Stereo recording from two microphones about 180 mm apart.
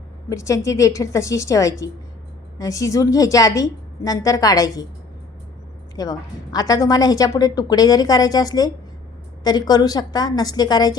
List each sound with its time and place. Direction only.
0.3 s a woman's voice: 15° left (ahead or behind)
6.0 s a woman's voice: 20° left (ahead or behind)